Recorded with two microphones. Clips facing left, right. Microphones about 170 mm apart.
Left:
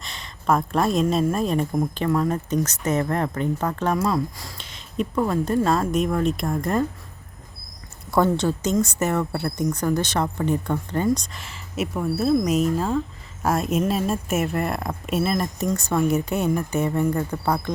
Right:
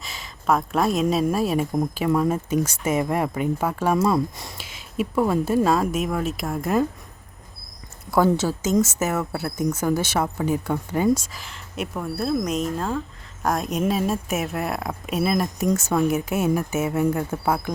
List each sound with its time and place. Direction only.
0.0 s a sound: 5° right (ahead or behind)
1.1 s speech: 5° right (ahead or behind)
3.9 s speech: 20° right (ahead or behind)
4.5 s speech: 5° right (ahead or behind)
8.1 s speech: 5° right (ahead or behind)